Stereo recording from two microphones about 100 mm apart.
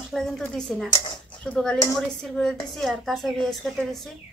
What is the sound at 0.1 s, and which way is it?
A woman's voice, 5° left (ahead or behind).